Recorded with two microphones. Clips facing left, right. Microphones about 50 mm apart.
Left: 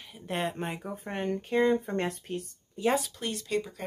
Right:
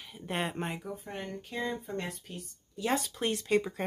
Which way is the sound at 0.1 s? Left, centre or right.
Centre.